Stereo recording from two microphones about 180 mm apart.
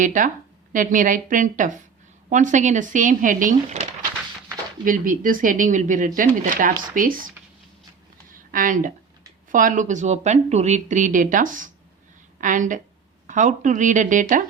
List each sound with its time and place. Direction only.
0.0 s speech: 45° right (ahead or behind)
4.9 s speech: 50° right (ahead or behind)
8.3 s a sound: 50° right (ahead or behind)
9.5 s speech: 45° right (ahead or behind)